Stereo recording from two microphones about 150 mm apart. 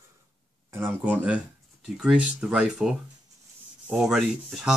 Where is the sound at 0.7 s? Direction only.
15° right (ahead or behind).